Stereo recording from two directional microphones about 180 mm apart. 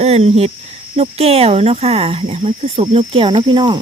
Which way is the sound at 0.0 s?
35° right (ahead or behind).